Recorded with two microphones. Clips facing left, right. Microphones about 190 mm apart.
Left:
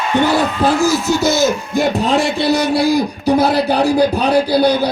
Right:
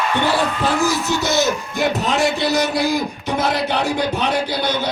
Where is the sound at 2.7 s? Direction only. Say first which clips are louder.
Left 5 dB; 35° left (ahead or behind).